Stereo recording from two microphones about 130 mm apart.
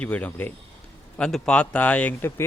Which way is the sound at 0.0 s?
10° left (ahead or behind).